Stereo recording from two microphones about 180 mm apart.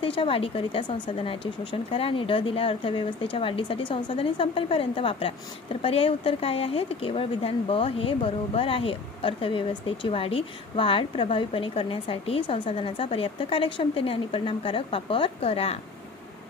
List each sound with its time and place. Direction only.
0.0 s speech: 30° left (ahead or behind)